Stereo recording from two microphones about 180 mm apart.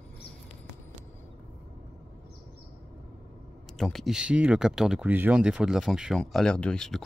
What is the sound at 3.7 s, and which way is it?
Speech, centre (ahead or behind).